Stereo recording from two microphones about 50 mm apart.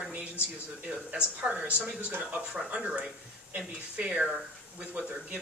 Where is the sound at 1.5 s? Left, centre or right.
Right.